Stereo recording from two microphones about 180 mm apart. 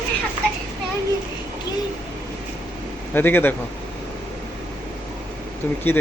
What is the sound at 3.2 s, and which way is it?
Speech, 10° left (ahead or behind).